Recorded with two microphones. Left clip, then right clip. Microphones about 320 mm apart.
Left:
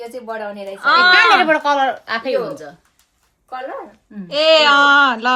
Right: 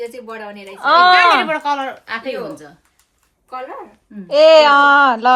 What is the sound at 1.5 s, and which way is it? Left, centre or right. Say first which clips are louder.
Speech: left 4 dB; left.